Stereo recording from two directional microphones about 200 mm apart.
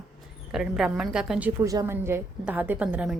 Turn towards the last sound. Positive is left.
turn(degrees=-5)  # may be behind; listen again after turning